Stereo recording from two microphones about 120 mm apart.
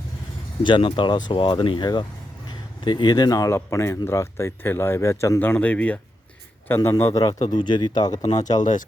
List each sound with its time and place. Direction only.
0.6 s speech: 45° left (ahead or behind); by 7.3 s 30° left (ahead or behind)
7.4 s speech: 40° left (ahead or behind)